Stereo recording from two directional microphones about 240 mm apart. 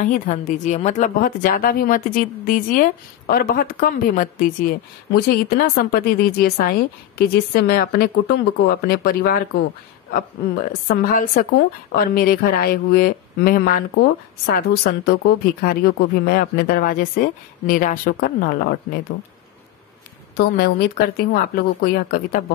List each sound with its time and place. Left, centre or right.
0.0 s speech: left
20.3 s speech: left